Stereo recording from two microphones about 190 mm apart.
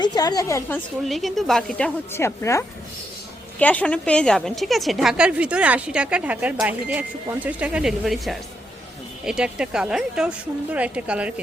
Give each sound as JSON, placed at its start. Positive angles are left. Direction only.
{"t": 0.0, "sound": "a woman's voice", "side_deg": 20}
{"t": 1.0, "sound": "a woman's voice", "side_deg": 0}
{"t": 2.1, "sound": "a woman's voice", "side_deg": 15}